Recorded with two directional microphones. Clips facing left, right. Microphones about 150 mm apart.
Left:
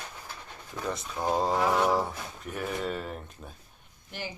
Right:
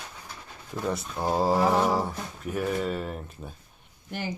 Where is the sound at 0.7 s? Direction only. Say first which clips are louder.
Right 3 dB; 10° right (ahead or behind).